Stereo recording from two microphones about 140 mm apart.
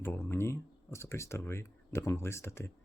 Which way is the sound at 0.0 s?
15° left (ahead or behind).